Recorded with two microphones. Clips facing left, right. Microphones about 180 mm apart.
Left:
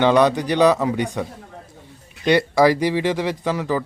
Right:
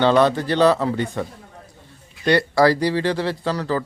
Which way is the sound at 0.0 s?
15° left (ahead or behind).